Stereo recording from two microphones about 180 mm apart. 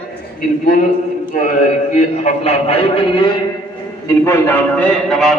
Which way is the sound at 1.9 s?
35° left (ahead or behind).